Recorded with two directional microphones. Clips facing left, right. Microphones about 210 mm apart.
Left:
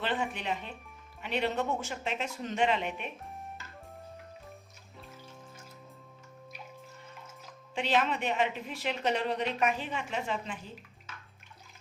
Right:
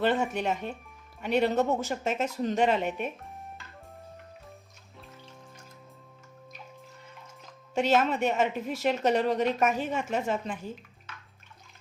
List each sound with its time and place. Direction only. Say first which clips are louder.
0.0 s speech: right 7 dB; 45° right (ahead or behind)
3.2 s music: even; centre (ahead or behind)
4.9 s music: even; 5° left (ahead or behind)
7.8 s speech: right 5 dB; 45° right (ahead or behind)